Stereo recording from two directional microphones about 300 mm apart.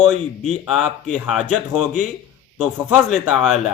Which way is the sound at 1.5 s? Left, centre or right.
Left.